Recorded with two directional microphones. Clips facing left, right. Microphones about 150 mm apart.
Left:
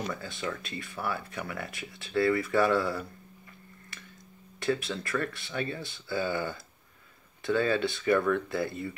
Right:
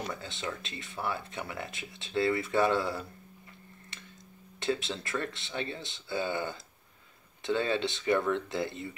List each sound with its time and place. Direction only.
0.1 s speech: 25° right (ahead or behind)
3.9 s a sound: 20° right (ahead or behind)
4.6 s speech: 25° right (ahead or behind)